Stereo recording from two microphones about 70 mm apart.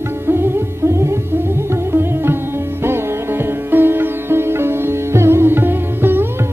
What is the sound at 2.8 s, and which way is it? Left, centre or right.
Sitar, right.